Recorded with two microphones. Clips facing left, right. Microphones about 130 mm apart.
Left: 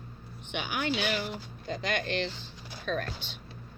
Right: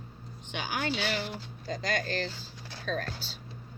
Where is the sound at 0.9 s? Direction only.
50° left (ahead or behind).